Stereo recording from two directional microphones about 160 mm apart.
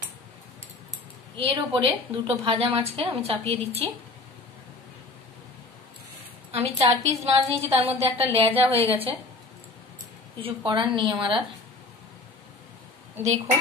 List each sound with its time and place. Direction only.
1.3 s a woman's voice: 35° right (ahead or behind)
6.5 s a woman's voice: 40° right (ahead or behind)
10.4 s a woman's voice: 30° right (ahead or behind)